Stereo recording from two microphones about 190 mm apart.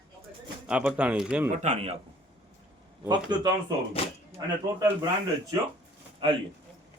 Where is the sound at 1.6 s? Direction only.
35° right (ahead or behind).